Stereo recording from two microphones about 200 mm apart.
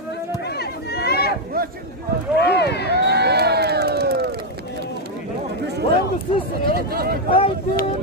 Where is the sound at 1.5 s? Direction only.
50° right (ahead or behind).